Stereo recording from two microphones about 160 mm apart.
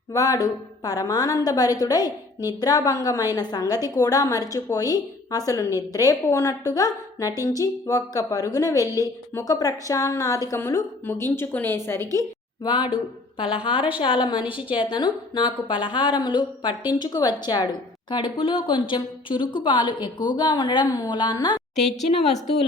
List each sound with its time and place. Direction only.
0.1 s a woman's voice: 20° left (ahead or behind)
12.6 s a woman's voice: 30° left (ahead or behind)
14.3 s a woman's voice: 10° right (ahead or behind)
14.7 s a woman's voice: 30° left (ahead or behind)